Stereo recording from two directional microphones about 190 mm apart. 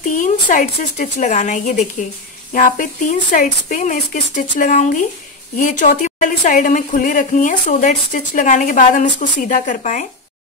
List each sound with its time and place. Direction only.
0.0 s a woman's voice: 45° left (ahead or behind)